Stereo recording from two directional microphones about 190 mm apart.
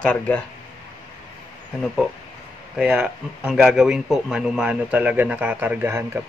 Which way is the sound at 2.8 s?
5° right (ahead or behind).